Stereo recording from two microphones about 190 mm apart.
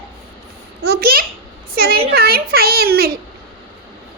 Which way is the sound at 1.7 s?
55° right (ahead or behind).